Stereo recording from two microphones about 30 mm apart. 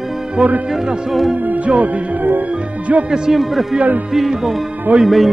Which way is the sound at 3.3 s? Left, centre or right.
Centre.